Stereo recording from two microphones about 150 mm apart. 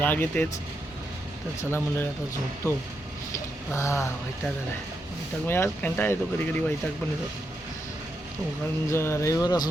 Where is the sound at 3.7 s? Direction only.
20° left (ahead or behind).